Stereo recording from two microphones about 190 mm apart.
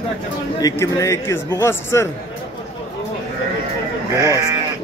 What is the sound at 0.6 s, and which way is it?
A man's voice, 15° left (ahead or behind).